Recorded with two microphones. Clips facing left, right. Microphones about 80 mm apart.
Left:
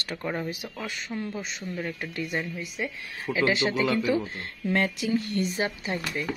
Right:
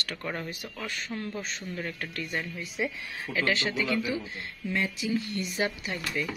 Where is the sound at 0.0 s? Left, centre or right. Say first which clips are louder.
Left 4 dB; centre.